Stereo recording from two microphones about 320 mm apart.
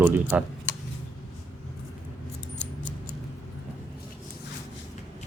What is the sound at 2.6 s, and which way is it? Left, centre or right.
Scissors, left.